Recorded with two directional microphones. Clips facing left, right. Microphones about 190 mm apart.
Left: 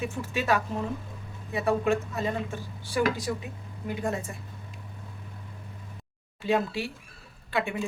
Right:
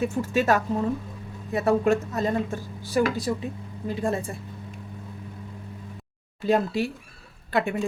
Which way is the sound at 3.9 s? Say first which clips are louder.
Right 4 dB; 30° right (ahead or behind).